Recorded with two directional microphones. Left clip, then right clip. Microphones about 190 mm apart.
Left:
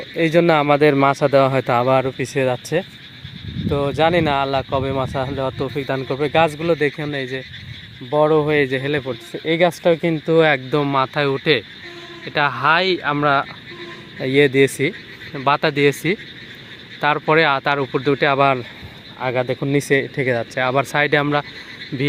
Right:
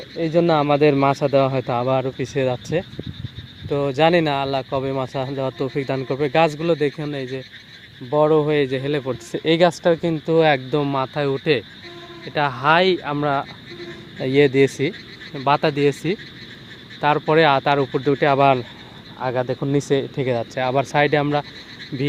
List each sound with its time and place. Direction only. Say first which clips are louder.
0.2 s speech: left 3 dB; 15° left (ahead or behind); by 9.1 s 5° right (ahead or behind)
9.3 s speech: right 2 dB; 20° right (ahead or behind)
9.6 s speech: left 2 dB; centre (ahead or behind)